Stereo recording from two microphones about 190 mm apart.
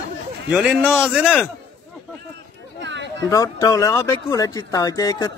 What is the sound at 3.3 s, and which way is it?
Speech, 15° left (ahead or behind).